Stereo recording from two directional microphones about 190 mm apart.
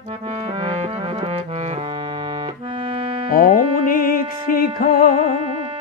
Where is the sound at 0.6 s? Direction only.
30° right (ahead or behind).